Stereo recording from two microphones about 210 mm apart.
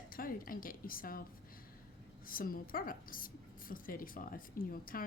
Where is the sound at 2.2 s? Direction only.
45° left (ahead or behind).